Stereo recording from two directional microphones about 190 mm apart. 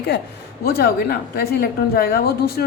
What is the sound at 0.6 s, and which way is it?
A woman's voice, 55° left (ahead or behind).